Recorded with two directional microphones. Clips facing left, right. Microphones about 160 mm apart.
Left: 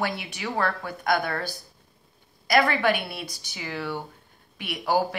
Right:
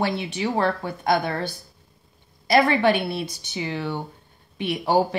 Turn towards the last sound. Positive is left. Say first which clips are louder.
# right 4 dB
turn(degrees=-25)  # may be behind; listen again after turning